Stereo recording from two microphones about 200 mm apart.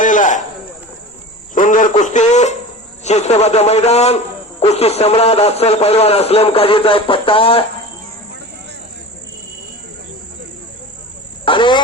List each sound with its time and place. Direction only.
0.0 s a sound: 40° left (ahead or behind)
1.5 s radio: 40° left (ahead or behind)
3.0 s a man's voice: 35° left (ahead or behind)
11.4 s speech: 25° left (ahead or behind)